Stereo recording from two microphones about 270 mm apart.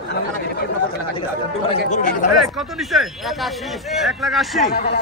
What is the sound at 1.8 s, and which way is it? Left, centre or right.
Speech, left.